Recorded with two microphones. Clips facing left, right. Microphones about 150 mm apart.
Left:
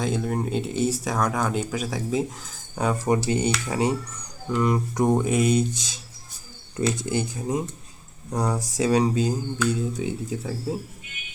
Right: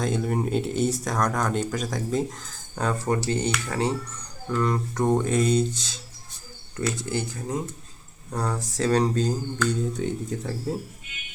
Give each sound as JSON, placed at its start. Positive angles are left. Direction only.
{"t": 0.0, "sound": "speech", "side_deg": 0}